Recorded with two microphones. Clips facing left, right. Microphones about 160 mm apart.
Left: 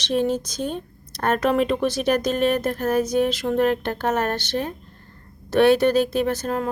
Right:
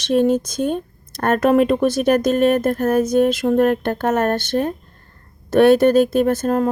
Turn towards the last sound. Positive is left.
turn(degrees=-45)  # may be behind; listen again after turning